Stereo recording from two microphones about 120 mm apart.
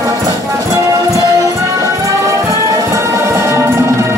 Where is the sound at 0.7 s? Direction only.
25° right (ahead or behind).